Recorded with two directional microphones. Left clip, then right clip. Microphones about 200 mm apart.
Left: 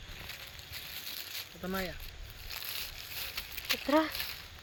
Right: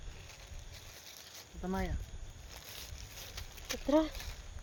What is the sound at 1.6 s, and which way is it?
Speech, 40° right (ahead or behind).